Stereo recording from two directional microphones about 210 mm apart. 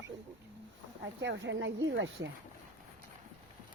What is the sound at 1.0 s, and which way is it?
Speech, 60° right (ahead or behind).